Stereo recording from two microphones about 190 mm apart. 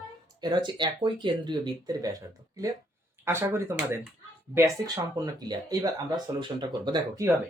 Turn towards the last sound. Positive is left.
turn(degrees=-20)  # may be behind; listen again after turning